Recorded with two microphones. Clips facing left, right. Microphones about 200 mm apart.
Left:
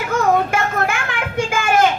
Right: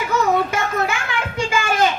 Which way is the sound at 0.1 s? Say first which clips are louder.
Left 2 dB; 55° left (ahead or behind).